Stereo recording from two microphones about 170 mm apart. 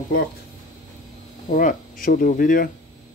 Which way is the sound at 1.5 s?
55° left (ahead or behind).